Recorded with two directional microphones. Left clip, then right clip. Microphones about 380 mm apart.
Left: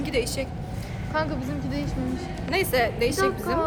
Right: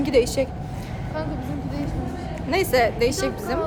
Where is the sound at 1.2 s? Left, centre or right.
Left.